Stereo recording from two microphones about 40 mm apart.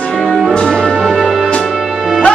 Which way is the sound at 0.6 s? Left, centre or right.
Centre.